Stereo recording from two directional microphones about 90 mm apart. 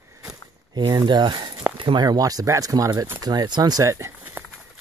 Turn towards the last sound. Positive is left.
turn(degrees=-25)  # may be behind; listen again after turning